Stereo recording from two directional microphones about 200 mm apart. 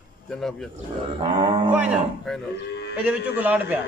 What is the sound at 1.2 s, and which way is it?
Cattle, 25° right (ahead or behind).